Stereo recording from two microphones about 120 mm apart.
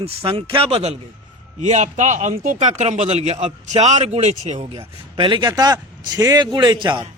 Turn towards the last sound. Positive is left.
turn(degrees=-40)  # may be behind; listen again after turning